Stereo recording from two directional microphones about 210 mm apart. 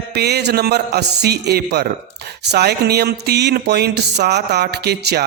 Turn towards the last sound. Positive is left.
turn(degrees=-50)  # may be behind; listen again after turning